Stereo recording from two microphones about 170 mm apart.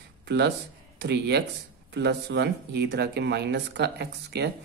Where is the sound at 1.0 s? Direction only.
80° right.